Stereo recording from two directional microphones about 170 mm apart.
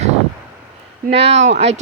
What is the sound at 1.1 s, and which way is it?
Speech, 40° right (ahead or behind).